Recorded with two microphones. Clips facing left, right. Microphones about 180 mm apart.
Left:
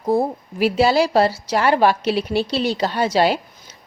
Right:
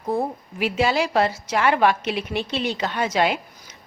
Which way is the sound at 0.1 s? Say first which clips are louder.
Left 5 dB; 35° left (ahead or behind).